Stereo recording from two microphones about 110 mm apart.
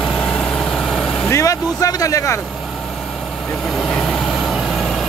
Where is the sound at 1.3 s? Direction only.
30° left (ahead or behind).